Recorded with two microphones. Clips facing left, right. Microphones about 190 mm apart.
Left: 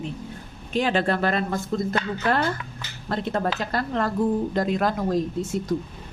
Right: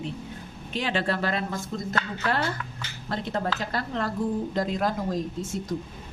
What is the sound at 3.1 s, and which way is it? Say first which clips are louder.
A woman's voice: left 3 dB; 55° left (ahead or behind).